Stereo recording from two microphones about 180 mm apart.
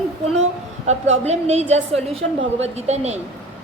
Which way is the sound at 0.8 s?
35° right (ahead or behind).